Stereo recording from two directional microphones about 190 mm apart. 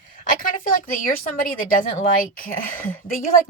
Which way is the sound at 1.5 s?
45° left (ahead or behind).